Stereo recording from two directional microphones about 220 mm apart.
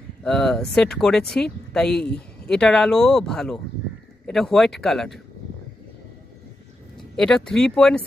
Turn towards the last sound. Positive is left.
turn(degrees=5)  # may be behind; listen again after turning